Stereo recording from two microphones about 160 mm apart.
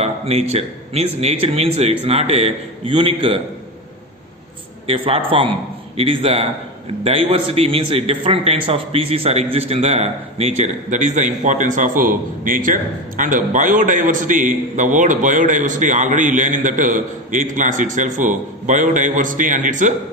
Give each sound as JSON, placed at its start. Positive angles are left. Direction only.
{"t": 0.0, "sound": "speech", "side_deg": -40}
{"t": 4.8, "sound": "a man's voice", "side_deg": -35}